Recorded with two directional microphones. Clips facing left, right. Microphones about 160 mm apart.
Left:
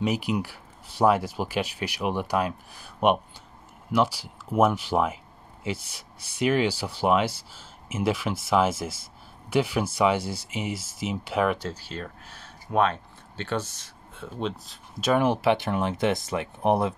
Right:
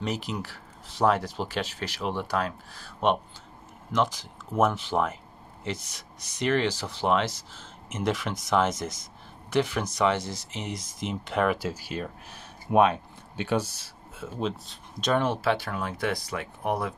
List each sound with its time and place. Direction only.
0.0 s speech: 10° left (ahead or behind)
11.5 s speech: 10° right (ahead or behind); by 16.9 s 25° left (ahead or behind)